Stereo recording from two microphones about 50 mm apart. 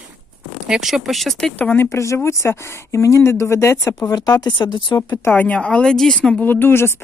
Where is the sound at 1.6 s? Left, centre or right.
Left.